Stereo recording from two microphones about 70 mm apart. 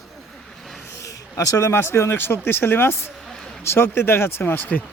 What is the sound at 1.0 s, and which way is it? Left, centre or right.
Speech, left.